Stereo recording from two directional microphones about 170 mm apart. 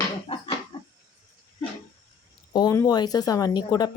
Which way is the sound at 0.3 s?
35° left (ahead or behind).